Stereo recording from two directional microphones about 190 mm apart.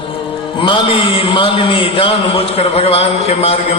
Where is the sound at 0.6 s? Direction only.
25° left (ahead or behind).